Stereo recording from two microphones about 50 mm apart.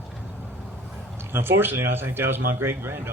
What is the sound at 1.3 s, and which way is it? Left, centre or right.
A man's voice, right.